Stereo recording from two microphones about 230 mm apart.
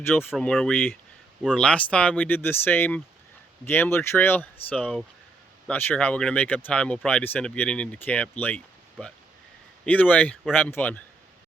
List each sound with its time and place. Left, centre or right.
0.1 s speech: centre